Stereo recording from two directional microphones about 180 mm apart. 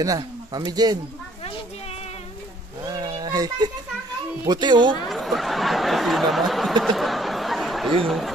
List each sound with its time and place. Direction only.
0.0 s a man's voice: 20° right (ahead or behind)
2.9 s a sound: 20° right (ahead or behind)
4.5 s speech: 25° right (ahead or behind)
5.0 s speech: centre (ahead or behind)